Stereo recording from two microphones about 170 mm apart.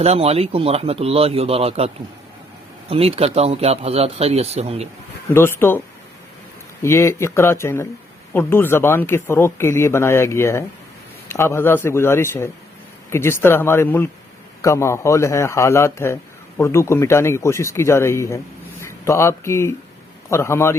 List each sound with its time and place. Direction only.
0.0 s speech: 35° right (ahead or behind)
2.9 s speech: 35° right (ahead or behind)
5.3 s speech: 15° left (ahead or behind)
6.8 s speech: 15° left (ahead or behind)